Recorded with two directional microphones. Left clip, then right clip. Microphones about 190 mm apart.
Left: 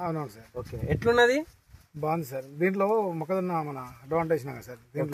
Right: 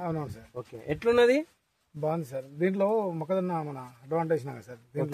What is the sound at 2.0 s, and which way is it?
Speech, 25° left (ahead or behind).